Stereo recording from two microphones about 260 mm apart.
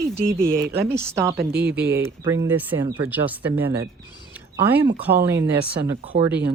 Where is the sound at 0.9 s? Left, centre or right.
Centre.